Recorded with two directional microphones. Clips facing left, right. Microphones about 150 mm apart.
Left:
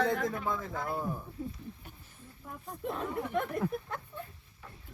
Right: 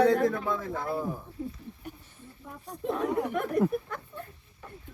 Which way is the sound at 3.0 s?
90° right.